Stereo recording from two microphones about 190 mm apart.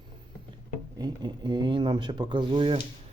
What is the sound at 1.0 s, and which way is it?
Speech, 20° right (ahead or behind).